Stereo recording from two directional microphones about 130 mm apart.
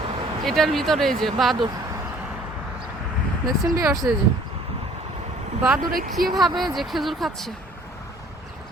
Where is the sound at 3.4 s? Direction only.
25° right (ahead or behind).